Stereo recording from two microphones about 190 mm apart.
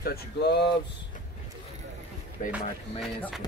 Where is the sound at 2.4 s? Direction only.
40° left (ahead or behind).